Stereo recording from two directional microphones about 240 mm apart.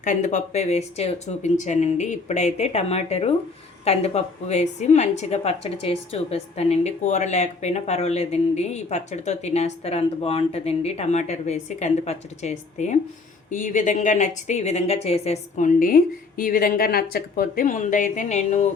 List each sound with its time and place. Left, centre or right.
0.0 s a woman's voice: left